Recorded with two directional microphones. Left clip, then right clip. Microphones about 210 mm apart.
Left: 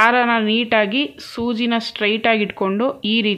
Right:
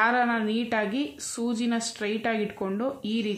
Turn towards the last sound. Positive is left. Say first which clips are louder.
# left 11 dB
turn(degrees=30)  # may be behind; listen again after turning